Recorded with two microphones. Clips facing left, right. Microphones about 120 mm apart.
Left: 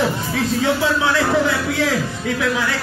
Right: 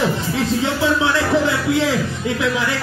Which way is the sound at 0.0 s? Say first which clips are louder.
Even; 20° right (ahead or behind).